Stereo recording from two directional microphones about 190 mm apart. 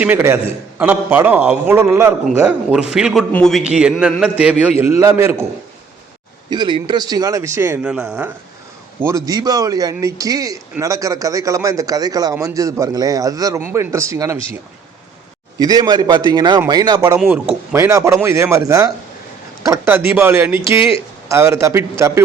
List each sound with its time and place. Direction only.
0.0 s a man's voice: 10° right (ahead or behind)
6.5 s speech: 25° right (ahead or behind); by 8.3 s 5° right (ahead or behind)
9.0 s speech: 15° right (ahead or behind)
15.5 s a man's voice: 20° right (ahead or behind)
17.2 s speech: 10° right (ahead or behind)